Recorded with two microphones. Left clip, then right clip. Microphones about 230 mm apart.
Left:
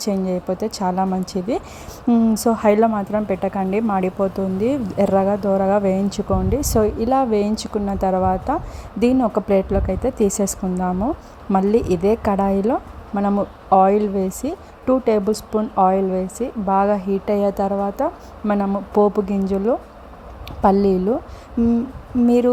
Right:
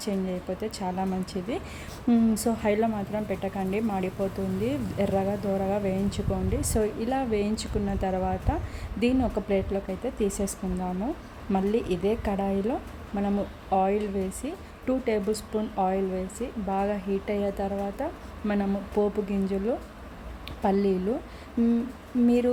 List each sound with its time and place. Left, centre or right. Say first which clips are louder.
0.0 s speech: left 9 dB; left
2.0 s speech: left 8 dB; centre
22.3 s speech: left 8 dB; left